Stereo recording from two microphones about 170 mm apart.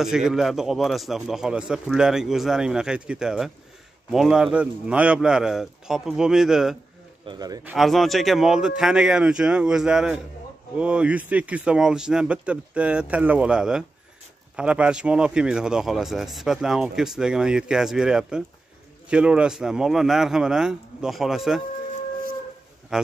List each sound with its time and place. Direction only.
0.0 s speech: 5° right (ahead or behind)
7.2 s speech: 25° right (ahead or behind)
7.6 s speech: centre (ahead or behind)